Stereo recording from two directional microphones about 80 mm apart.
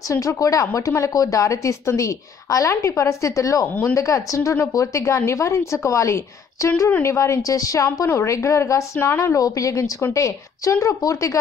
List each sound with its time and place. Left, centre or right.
0.1 s a woman's voice: left